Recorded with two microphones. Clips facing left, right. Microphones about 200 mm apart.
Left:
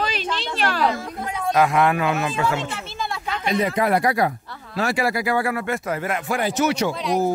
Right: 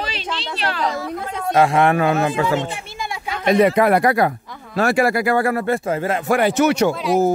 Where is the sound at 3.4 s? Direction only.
60° right (ahead or behind); by 6.3 s 30° right (ahead or behind).